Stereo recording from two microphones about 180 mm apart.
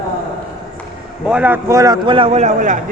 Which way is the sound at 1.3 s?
10° right (ahead or behind).